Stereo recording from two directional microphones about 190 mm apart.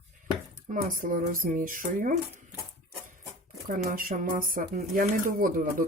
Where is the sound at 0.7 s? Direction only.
45° right (ahead or behind).